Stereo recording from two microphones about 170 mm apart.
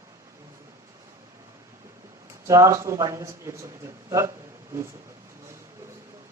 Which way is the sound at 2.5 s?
20° right (ahead or behind).